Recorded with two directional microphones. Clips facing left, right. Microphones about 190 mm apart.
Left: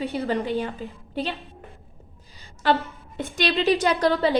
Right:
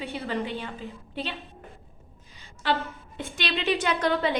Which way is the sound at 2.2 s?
40° left (ahead or behind).